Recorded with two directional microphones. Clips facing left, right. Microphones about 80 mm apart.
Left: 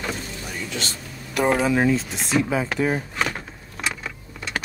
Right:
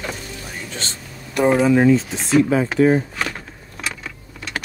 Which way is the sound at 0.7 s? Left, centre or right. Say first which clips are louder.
Left 1 dB; right.